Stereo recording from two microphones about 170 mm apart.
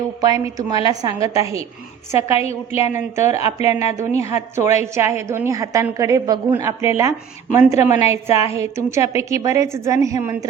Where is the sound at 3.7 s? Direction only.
15° right (ahead or behind).